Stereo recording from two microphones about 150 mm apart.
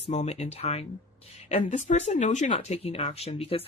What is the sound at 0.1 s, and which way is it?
Speech, 50° left (ahead or behind).